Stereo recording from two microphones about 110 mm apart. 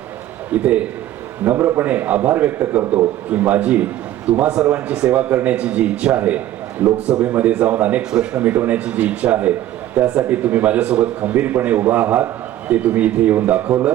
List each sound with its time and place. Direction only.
0.5 s a man's voice: 10° right (ahead or behind)
1.5 s a man's voice: 25° right (ahead or behind)